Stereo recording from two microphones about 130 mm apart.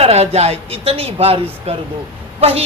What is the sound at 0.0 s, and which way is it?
Speech, 50° right (ahead or behind).